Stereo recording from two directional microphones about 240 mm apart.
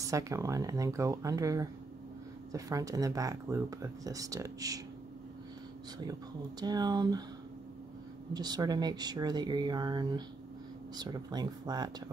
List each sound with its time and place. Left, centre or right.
0.0 s speech: centre
6.6 s speech: centre
8.3 s speech: centre